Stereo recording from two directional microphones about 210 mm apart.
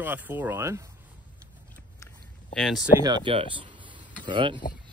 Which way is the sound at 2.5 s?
Centre (ahead or behind).